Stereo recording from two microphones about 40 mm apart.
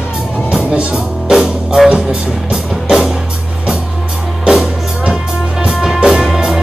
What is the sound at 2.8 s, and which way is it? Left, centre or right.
Music, centre.